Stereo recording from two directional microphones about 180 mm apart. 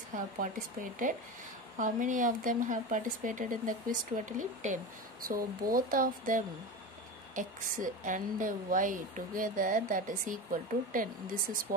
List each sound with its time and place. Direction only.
0.1 s a woman's voice: 45° right (ahead or behind)
1.8 s a woman's voice: 45° right (ahead or behind)